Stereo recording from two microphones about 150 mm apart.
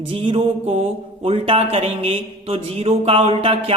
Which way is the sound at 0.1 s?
35° right (ahead or behind).